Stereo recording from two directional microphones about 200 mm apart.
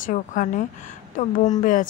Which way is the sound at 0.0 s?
40° left (ahead or behind).